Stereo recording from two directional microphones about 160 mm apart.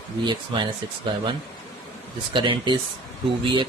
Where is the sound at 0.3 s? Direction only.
30° right (ahead or behind).